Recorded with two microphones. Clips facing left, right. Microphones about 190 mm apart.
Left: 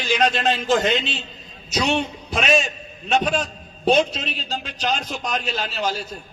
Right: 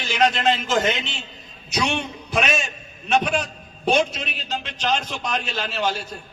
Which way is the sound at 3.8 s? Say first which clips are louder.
Left 2 dB; 35° left (ahead or behind).